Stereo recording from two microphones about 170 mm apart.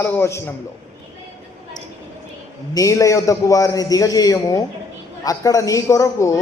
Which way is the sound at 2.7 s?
20° left (ahead or behind).